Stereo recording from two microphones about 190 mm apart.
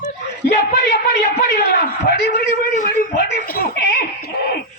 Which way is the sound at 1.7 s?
55° left (ahead or behind).